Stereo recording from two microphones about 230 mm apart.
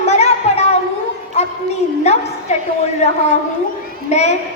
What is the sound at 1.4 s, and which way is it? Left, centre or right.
Music, left.